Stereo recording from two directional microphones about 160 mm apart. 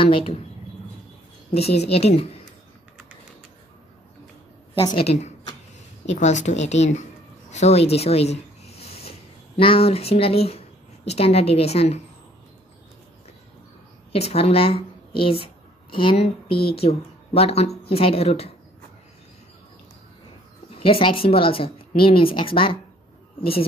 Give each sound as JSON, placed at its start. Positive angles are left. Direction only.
{"t": 0.0, "sound": "a woman's voice", "side_deg": 35}
{"t": 1.5, "sound": "a woman's voice", "side_deg": 40}
{"t": 4.8, "sound": "a woman's voice", "side_deg": 40}
{"t": 7.5, "sound": "a sound", "side_deg": 40}
{"t": 9.6, "sound": "a woman's voice", "side_deg": 35}
{"t": 14.1, "sound": "a woman's voice", "side_deg": 40}
{"t": 20.7, "sound": "a woman's voice", "side_deg": 35}